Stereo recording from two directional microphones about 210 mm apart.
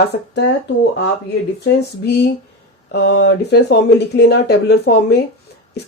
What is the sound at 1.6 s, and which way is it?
Speech, 50° left (ahead or behind).